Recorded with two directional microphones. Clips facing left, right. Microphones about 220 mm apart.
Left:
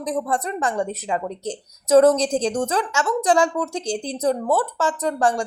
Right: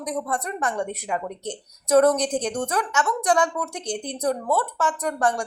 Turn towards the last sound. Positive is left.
turn(degrees=25)  # may be behind; listen again after turning